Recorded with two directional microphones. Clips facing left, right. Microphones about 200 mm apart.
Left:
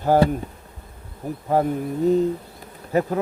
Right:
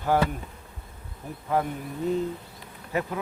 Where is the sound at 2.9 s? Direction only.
40° left (ahead or behind).